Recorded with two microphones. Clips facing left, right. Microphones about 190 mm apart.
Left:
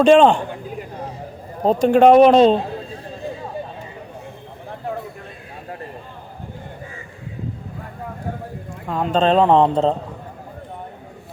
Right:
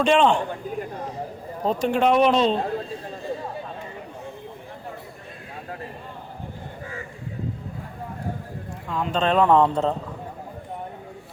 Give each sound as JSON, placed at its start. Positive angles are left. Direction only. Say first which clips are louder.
{"t": 0.0, "sound": "a man's voice", "louder": "left 7 dB", "side_deg": 40}
{"t": 1.6, "sound": "speech", "louder": "left 8 dB", "side_deg": 40}
{"t": 8.9, "sound": "speech", "louder": "left 6 dB", "side_deg": 40}